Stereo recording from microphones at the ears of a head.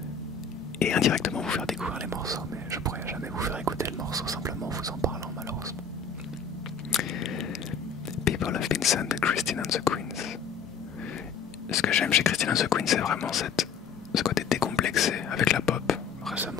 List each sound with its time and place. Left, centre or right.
0.7 s speech: left
6.9 s biting: left
8.3 s whispering: left
11.7 s speech: left